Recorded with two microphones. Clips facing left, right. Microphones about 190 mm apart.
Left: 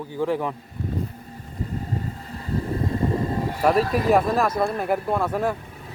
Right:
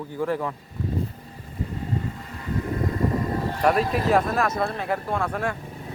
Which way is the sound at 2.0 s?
35° left (ahead or behind).